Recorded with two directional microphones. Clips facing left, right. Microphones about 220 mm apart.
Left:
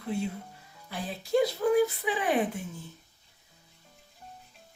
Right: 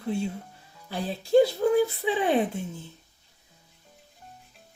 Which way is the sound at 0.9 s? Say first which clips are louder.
Right 4 dB; 30° right (ahead or behind).